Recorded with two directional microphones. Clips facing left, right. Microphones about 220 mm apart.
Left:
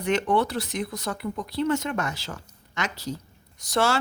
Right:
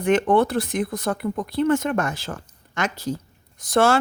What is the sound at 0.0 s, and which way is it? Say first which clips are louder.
A woman's voice: right 5 dB; 50° right (ahead or behind).